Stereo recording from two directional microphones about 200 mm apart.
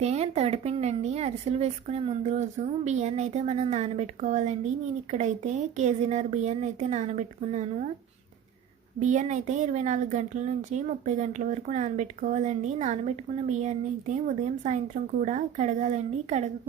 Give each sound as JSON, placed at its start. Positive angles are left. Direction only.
{"t": 0.0, "sound": "speech", "side_deg": -30}
{"t": 9.0, "sound": "speech", "side_deg": -35}